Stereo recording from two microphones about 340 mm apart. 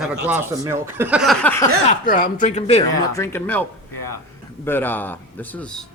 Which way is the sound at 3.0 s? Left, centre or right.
Centre.